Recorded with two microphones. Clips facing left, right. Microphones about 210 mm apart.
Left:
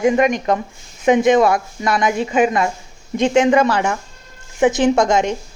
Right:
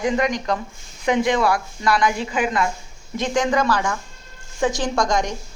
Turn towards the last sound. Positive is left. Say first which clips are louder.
# left 7 dB
turn(degrees=25)  # may be behind; listen again after turning